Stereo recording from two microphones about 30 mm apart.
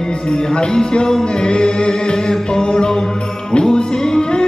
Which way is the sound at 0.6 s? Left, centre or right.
Left.